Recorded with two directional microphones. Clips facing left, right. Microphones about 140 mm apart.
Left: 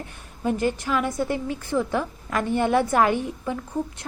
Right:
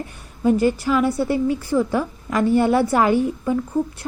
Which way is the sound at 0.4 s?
10° right (ahead or behind).